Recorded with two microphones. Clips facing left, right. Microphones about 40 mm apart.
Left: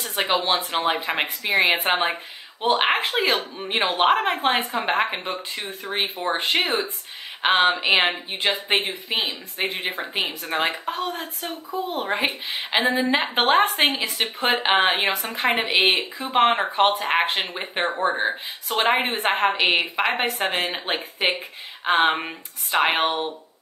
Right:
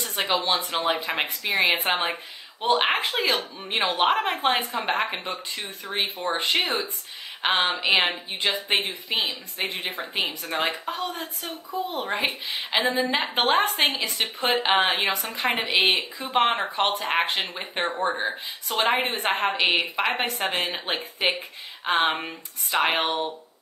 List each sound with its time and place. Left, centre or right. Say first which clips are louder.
0.2 s a woman's voice: left 2 dB; centre
7.4 s a woman's voice: left 4 dB; centre
12.3 s speech: left 2 dB; left
12.7 s a woman's voice: left 3 dB; centre
20.3 s speech: left 2 dB; left
20.6 s a woman's voice: left 2 dB; centre
23.0 s speech: left 2 dB; left